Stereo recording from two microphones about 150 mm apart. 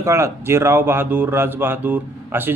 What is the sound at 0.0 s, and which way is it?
A man's voice, 20° right (ahead or behind).